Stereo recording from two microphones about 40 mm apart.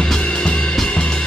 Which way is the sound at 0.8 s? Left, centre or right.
Left.